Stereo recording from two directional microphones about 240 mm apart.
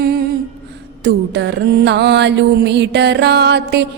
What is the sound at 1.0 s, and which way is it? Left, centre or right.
Music, right.